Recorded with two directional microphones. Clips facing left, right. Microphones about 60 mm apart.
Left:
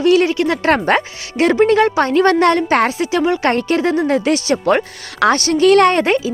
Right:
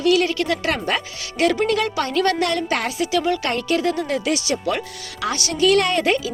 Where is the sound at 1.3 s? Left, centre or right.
Left.